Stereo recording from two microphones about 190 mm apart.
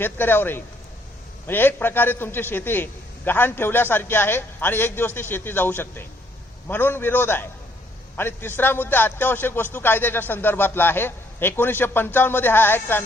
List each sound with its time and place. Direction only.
0.0 s a man's voice: 10° left (ahead or behind)